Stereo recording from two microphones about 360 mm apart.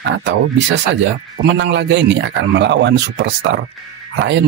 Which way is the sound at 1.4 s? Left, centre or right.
Right.